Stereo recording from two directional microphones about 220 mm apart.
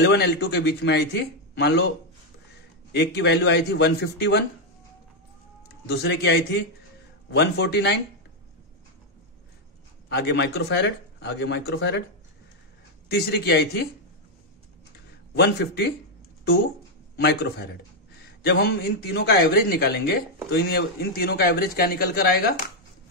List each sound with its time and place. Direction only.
0.0 s speech: 50° left (ahead or behind)
2.9 s speech: 50° left (ahead or behind)
5.7 s speech: 50° left (ahead or behind)
10.0 s speech: 50° left (ahead or behind)
13.1 s speech: 50° left (ahead or behind)
15.3 s speech: 50° left (ahead or behind)
17.2 s speech: 50° left (ahead or behind)